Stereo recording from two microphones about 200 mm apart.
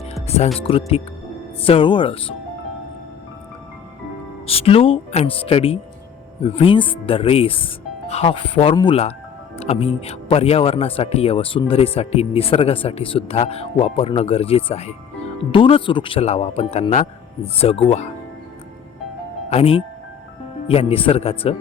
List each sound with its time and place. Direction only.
0.0 s music: 30° left (ahead or behind)
0.6 s speech: 30° left (ahead or behind)
4.4 s speech: 30° left (ahead or behind)
19.5 s speech: 30° left (ahead or behind)